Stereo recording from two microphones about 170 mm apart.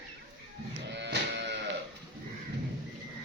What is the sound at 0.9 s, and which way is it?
Music, 90° right.